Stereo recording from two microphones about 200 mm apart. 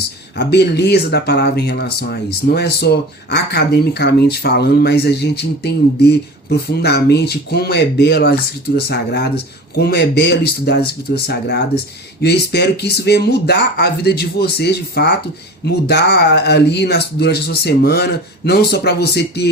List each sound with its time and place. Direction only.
0.3 s speech: 55° left (ahead or behind)